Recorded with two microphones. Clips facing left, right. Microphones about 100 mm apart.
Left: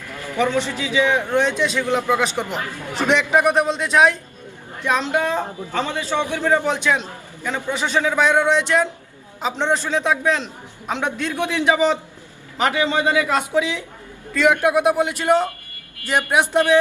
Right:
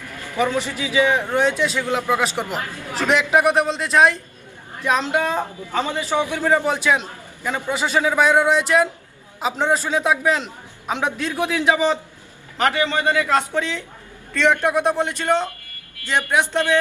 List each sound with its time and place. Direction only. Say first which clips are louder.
0.3 s a man's voice: left 1 dB; 10° right (ahead or behind)
5.1 s a man's voice: even; 15° right (ahead or behind)
11.7 s speech: left 2 dB; 10° left (ahead or behind)